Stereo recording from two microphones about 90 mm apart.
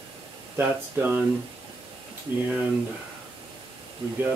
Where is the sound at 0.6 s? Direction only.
25° right (ahead or behind).